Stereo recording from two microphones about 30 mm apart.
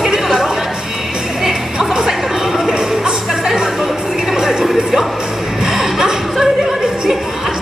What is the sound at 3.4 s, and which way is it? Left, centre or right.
Music, centre.